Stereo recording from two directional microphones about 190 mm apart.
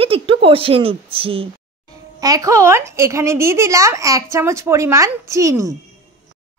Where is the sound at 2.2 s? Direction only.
20° right (ahead or behind).